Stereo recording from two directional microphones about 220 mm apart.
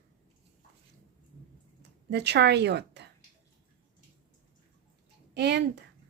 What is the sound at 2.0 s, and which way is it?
A woman's voice, 50° right (ahead or behind).